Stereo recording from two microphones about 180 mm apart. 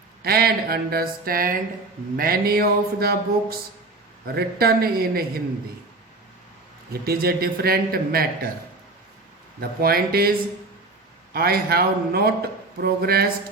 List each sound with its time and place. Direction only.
0.2 s a man's voice: 60° right (ahead or behind)
6.9 s a man's voice: 60° right (ahead or behind)
9.6 s a man's voice: 55° right (ahead or behind)
11.3 s a man's voice: 60° right (ahead or behind)